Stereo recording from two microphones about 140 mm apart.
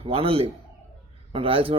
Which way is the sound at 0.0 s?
40° right (ahead or behind).